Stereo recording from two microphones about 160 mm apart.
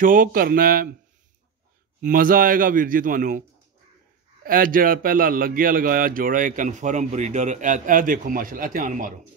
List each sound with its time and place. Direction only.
0.0 s speech: 60° right (ahead or behind)
2.0 s speech: 60° right (ahead or behind)
4.5 s speech: 60° right (ahead or behind)